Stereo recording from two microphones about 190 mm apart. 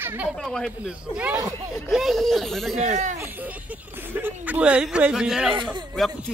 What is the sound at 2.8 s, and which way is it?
Speech, 40° right (ahead or behind).